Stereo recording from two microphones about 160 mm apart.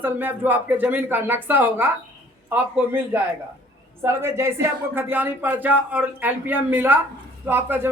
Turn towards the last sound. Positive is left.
turn(degrees=-15)  # may be behind; listen again after turning